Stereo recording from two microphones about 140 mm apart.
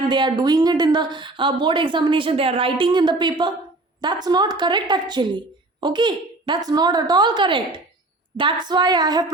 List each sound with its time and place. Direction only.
0.1 s speech: 30° right (ahead or behind)